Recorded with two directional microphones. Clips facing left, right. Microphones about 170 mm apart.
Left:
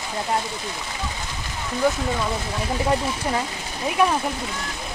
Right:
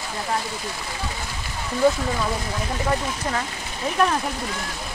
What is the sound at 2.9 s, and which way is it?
Speech, 15° left (ahead or behind).